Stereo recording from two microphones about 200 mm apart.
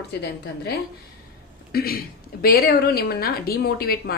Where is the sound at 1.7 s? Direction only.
50° left (ahead or behind).